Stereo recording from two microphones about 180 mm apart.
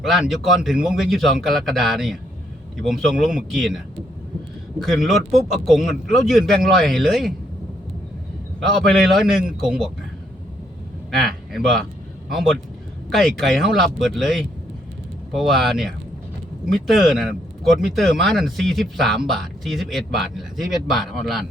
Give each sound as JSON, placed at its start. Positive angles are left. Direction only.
{"t": 0.0, "sound": "speech", "side_deg": 0}
{"t": 4.9, "sound": "speech", "side_deg": 0}
{"t": 8.7, "sound": "speech", "side_deg": 0}
{"t": 11.5, "sound": "speech", "side_deg": 0}